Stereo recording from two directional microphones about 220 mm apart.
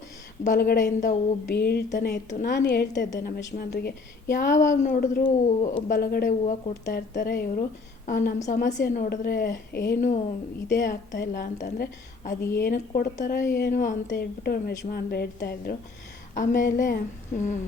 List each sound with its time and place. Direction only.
0.4 s a woman's voice: 40° left (ahead or behind)